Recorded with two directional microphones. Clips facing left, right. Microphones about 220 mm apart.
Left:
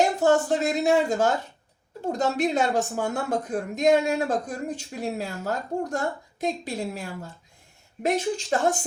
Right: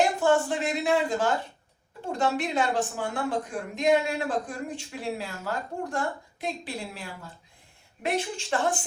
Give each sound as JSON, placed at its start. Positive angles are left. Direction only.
{"t": 0.2, "sound": "speech", "side_deg": 40}